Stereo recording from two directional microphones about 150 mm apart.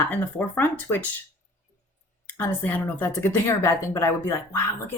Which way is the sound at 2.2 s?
10° left (ahead or behind).